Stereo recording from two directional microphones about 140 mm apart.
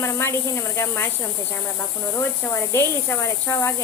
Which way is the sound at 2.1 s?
20° left (ahead or behind).